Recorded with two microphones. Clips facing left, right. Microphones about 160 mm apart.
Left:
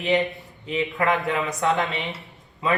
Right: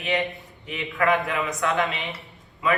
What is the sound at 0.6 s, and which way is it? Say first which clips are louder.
Speech: left 1 dB; 25° left (ahead or behind).